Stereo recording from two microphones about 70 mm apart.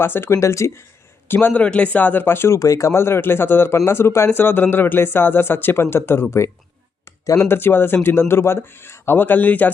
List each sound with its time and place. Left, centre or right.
0.0 s speech: left
1.3 s speech: left
2.6 s speech: left
7.0 s a sound: left
7.4 s speech: left